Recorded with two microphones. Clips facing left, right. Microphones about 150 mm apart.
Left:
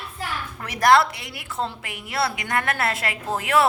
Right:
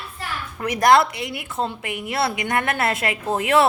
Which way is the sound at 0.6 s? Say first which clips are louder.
Right 2 dB; 20° right (ahead or behind).